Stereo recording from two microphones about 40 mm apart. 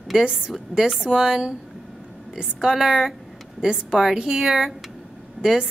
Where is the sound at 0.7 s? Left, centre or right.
Centre.